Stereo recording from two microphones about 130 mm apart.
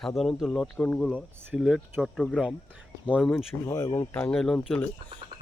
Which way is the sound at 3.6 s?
25° left (ahead or behind).